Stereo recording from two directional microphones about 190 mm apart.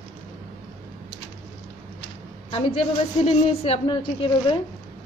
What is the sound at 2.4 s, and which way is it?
A woman's voice, 30° left (ahead or behind).